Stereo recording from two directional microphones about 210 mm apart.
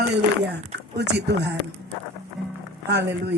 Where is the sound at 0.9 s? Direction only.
55° right (ahead or behind).